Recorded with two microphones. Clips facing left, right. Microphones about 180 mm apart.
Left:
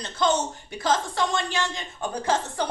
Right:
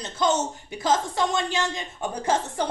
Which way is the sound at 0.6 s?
20° right (ahead or behind).